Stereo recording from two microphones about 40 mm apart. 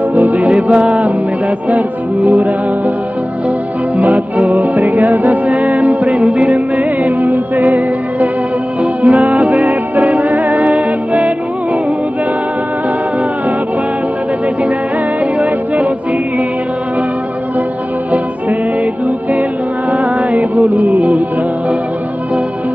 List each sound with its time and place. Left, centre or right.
0.1 s music: right
4.0 s music: right
15.3 s music: right
19.9 s music: right